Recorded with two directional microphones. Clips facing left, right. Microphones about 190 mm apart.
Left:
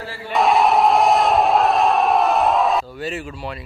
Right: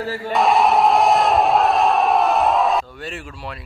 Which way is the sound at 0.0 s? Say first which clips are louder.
Right 7 dB; 40° right (ahead or behind).